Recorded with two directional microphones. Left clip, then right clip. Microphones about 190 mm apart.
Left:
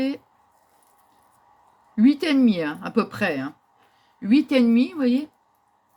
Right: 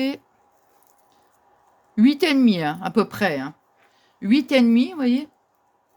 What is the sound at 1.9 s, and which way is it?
Speech, 70° right (ahead or behind).